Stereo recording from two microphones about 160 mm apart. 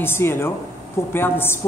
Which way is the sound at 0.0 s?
15° left (ahead or behind).